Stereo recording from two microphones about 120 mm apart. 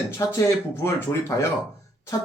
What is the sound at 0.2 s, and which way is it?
Speech, 20° left (ahead or behind).